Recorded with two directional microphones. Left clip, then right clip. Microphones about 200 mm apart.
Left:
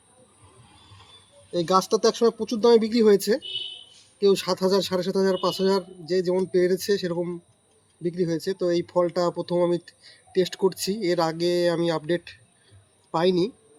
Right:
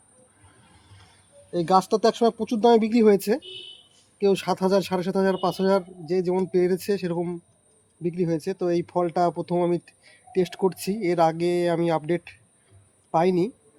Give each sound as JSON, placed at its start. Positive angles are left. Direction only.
{"t": 1.5, "sound": "a man's voice", "side_deg": -40}